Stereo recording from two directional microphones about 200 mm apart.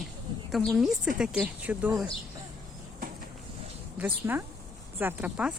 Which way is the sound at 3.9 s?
10° right (ahead or behind).